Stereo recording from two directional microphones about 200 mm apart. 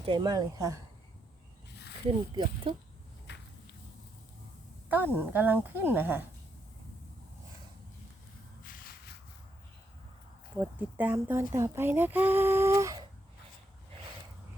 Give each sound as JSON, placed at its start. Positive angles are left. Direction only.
{"t": 0.0, "sound": "a woman's voice", "side_deg": -20}
{"t": 2.0, "sound": "a woman's voice", "side_deg": -25}
{"t": 3.3, "sound": "walk", "side_deg": 60}
{"t": 4.9, "sound": "speech", "side_deg": -10}
{"t": 8.6, "sound": "a sound", "side_deg": 45}
{"t": 10.6, "sound": "speech", "side_deg": -10}